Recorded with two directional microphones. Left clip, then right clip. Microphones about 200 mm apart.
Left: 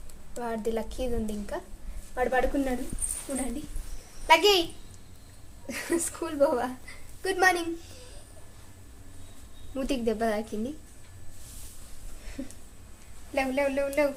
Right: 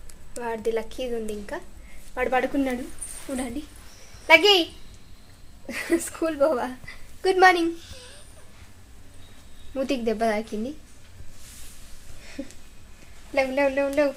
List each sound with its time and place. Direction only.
0.3 s a woman's voice: 25° right (ahead or behind)
4.3 s a woman's voice: 30° right (ahead or behind)
5.6 s a woman's voice: 30° right (ahead or behind)
9.7 s a woman's voice: 25° right (ahead or behind)
13.3 s a woman's voice: 30° right (ahead or behind)